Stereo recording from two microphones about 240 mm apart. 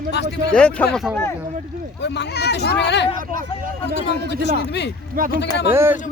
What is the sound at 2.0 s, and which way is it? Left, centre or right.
Speech, left.